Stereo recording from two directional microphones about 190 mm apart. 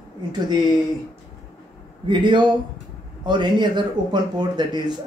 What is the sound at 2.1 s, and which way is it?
Speech, 25° right (ahead or behind).